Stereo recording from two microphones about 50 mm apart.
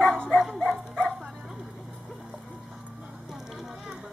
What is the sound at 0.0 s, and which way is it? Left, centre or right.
Dog, centre.